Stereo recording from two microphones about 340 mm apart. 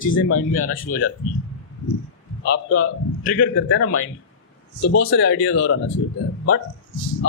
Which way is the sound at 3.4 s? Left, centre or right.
Left.